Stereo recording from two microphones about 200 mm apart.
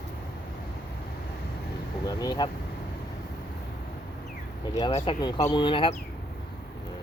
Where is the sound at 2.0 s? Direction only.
20° left (ahead or behind).